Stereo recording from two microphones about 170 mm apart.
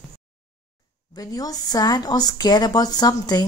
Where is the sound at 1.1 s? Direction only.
20° left (ahead or behind).